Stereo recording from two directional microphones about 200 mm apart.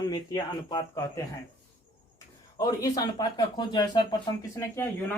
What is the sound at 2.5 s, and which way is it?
Speech, 15° left (ahead or behind).